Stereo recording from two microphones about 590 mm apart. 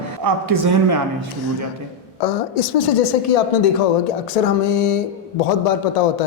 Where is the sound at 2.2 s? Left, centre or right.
Left.